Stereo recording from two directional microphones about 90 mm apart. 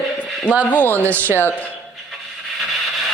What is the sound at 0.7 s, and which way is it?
Speech, 20° left (ahead or behind).